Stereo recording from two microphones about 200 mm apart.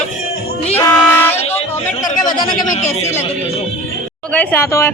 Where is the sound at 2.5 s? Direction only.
40° left (ahead or behind).